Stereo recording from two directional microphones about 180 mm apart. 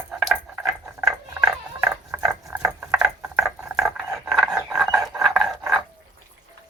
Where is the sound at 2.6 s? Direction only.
5° right (ahead or behind).